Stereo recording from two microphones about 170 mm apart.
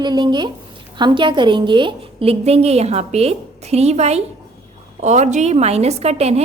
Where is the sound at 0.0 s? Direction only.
25° right (ahead or behind).